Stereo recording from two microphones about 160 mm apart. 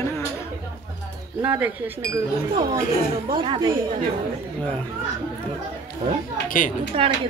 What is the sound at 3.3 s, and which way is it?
Speech, 30° right (ahead or behind).